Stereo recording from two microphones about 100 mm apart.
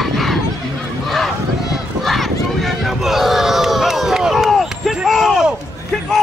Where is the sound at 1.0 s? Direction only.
Centre (ahead or behind).